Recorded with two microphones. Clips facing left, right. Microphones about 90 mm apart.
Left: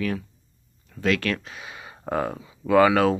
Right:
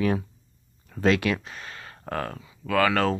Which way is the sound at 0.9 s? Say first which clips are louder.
Right 5 dB; 55° right (ahead or behind).